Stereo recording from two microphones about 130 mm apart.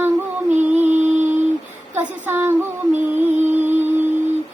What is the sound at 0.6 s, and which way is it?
Music, 15° right (ahead or behind).